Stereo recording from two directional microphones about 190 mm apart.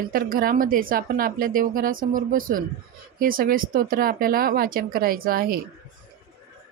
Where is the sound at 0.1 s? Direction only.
50° right (ahead or behind).